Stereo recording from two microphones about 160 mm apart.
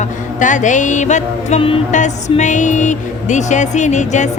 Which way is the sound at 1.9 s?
50° left (ahead or behind).